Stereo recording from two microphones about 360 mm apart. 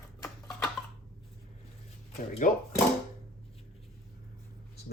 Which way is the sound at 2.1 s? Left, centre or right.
Centre.